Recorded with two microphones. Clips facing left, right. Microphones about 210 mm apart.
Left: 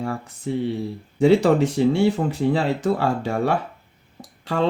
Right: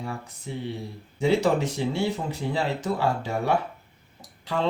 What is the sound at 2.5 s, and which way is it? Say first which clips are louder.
Speech: left 5 dB; 60° left (ahead or behind).